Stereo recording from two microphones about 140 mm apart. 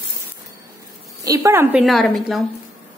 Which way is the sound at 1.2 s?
25° right (ahead or behind).